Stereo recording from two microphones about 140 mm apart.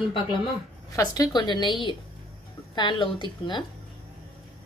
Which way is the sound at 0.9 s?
25° left (ahead or behind).